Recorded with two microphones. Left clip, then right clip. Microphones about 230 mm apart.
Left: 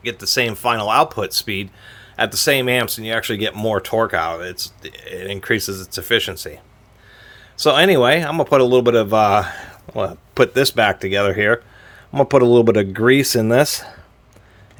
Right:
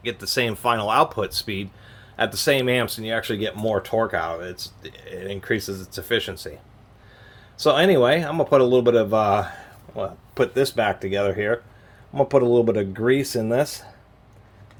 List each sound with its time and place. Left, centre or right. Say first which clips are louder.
0.0 s speech: left 5 dB; left